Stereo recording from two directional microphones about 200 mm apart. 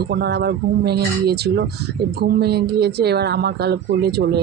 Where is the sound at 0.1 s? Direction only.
55° right (ahead or behind).